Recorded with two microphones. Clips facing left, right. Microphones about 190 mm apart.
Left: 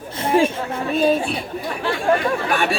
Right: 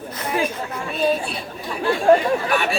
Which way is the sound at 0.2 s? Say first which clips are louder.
Left 6 dB; 30° left (ahead or behind).